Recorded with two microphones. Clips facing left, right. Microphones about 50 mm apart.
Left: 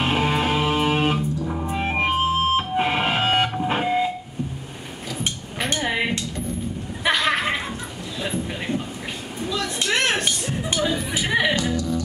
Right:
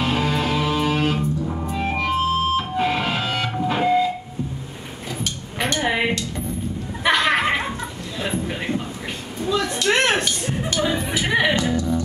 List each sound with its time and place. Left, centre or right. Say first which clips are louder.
0.0 s music: even; left
3.6 s fire alarm: right 3 dB; left
5.9 s music: right 3 dB; centre
7.2 s a sound: right 3 dB; right
9.8 s dishes: right 3 dB; right
10.8 s music: right 2 dB; right